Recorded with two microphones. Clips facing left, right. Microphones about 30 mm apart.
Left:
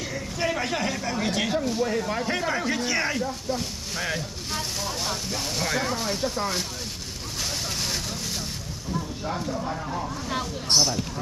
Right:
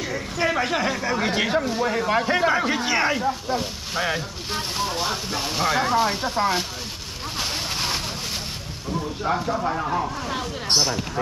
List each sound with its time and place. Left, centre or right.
0.1 s a sound: centre
1.2 s speech: right
1.8 s speech: right
2.4 s speech: right
9.2 s speech: right
9.5 s speech: right
10.7 s speech: right